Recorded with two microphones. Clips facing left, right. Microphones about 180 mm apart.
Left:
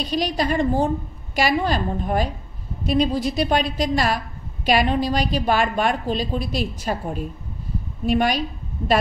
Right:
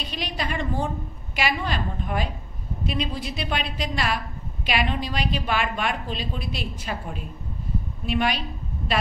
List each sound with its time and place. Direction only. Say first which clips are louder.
0.0 s a woman's voice: left 8 dB; 40° left (ahead or behind)